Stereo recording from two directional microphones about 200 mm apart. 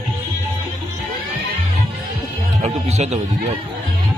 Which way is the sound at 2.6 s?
35° right (ahead or behind).